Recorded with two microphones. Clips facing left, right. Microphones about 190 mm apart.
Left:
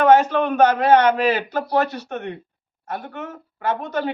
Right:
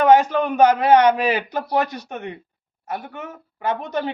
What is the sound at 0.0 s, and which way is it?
A man's voice, 10° right (ahead or behind).